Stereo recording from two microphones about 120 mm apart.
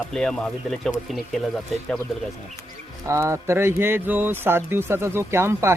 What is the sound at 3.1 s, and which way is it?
Speech, 25° right (ahead or behind).